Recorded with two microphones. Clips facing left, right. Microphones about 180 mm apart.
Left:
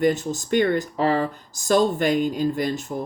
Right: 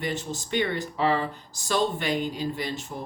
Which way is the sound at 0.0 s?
45° left (ahead or behind).